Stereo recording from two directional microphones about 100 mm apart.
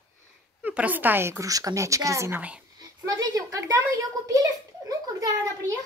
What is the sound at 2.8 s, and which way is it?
A woman's voice, 40° right (ahead or behind).